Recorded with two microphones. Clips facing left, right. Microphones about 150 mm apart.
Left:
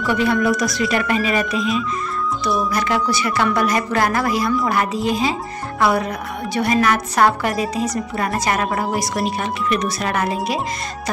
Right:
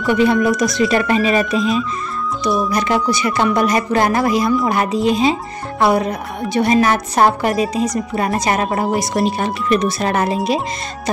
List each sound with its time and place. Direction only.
0.0 s speech: 20° right (ahead or behind)